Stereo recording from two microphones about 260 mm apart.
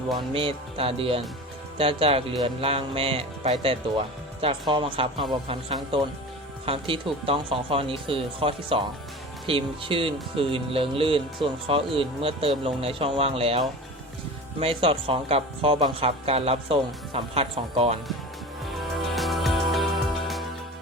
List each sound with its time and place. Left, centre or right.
0.1 s speech: right
19.1 s music: centre